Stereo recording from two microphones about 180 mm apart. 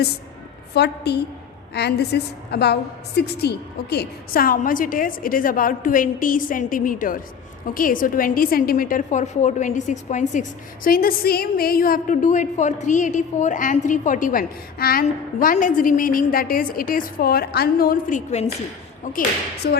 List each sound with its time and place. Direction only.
0.7 s a woman's voice: 65° left (ahead or behind); by 10.4 s 40° left (ahead or behind)
10.8 s a woman's voice: 55° left (ahead or behind)
15.0 s a woman's voice: 45° left (ahead or behind)
19.6 s a woman's voice: 60° left (ahead or behind)